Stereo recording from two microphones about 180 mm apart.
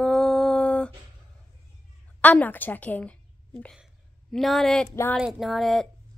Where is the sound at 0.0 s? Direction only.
Centre (ahead or behind).